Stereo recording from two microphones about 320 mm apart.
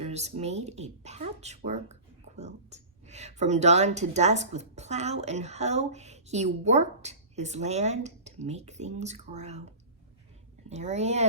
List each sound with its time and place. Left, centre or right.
0.0 s speech: right
10.7 s speech: right